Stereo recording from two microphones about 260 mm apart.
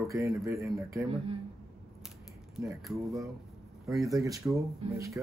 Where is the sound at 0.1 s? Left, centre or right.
Centre.